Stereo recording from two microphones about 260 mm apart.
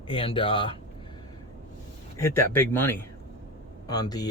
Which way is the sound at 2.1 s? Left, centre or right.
Centre.